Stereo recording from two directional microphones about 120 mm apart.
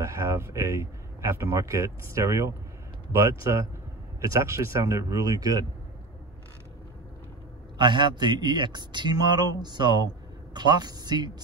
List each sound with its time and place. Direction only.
0.0 s speech: 25° right (ahead or behind)
7.7 s speech: 40° right (ahead or behind)